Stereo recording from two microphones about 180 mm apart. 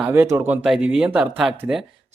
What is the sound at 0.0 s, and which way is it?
Speech, 10° right (ahead or behind).